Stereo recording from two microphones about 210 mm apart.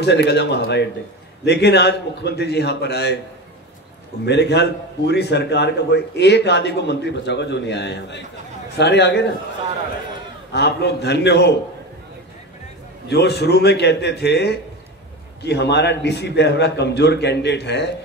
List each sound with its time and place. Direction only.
0.0 s a man's voice: 55° left (ahead or behind)
4.3 s a man's voice: 55° left (ahead or behind)
10.5 s a man's voice: 50° left (ahead or behind)
13.1 s a man's voice: 50° left (ahead or behind)